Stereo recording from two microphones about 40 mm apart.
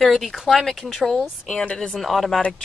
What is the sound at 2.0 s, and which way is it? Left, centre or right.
Speech, centre.